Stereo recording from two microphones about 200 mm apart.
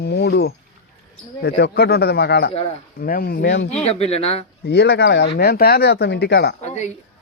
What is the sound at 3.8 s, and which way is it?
Speech, 30° left (ahead or behind).